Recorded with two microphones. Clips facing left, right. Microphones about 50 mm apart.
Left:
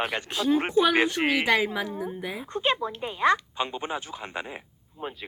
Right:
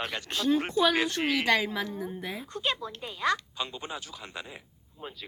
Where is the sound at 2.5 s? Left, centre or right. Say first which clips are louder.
Left 7 dB; left.